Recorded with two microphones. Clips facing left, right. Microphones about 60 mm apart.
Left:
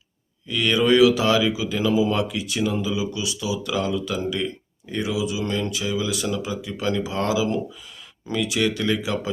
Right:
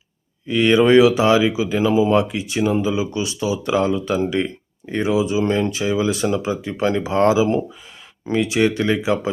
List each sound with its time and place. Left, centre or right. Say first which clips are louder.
0.4 s speech: right 6 dB; right